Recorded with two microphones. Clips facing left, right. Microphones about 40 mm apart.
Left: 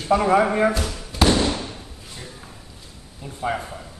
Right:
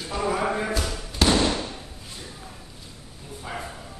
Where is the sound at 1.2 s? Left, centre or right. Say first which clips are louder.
Left 3 dB; centre.